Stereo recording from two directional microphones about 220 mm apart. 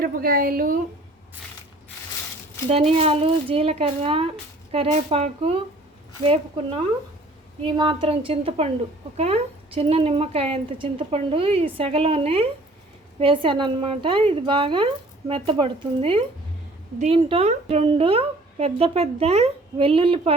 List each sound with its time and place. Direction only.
0.0 s a woman's voice: 40° right (ahead or behind)
2.6 s a woman's voice: 25° right (ahead or behind)